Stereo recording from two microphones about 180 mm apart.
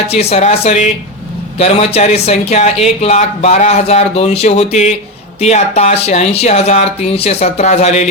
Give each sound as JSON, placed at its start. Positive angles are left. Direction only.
{"t": 0.1, "sound": "speech", "side_deg": 35}